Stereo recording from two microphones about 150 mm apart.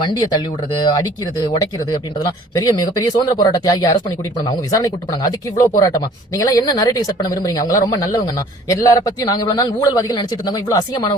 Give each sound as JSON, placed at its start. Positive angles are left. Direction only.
{"t": 0.0, "sound": "a man's voice", "side_deg": 30}